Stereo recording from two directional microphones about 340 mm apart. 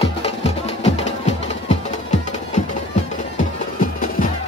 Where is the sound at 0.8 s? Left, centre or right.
Centre.